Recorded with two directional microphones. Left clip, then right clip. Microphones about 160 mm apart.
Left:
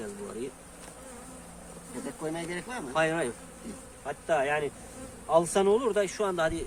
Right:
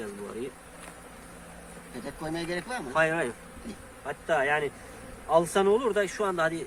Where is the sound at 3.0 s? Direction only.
Centre (ahead or behind).